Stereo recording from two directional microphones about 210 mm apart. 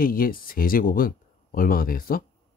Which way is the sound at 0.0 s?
45° left (ahead or behind).